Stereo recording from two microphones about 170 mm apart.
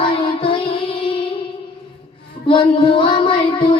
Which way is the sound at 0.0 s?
30° left (ahead or behind).